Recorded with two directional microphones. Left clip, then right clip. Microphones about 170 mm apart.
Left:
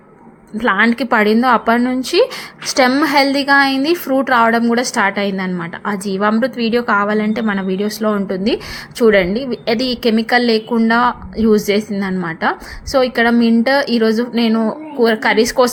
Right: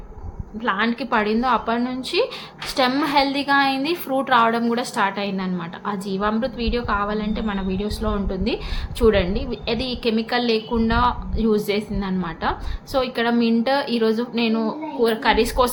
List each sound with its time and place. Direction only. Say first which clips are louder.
0.6 s a woman's voice: left 8 dB; 45° left (ahead or behind)